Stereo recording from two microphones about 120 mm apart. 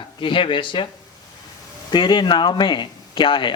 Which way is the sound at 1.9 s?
40° left (ahead or behind).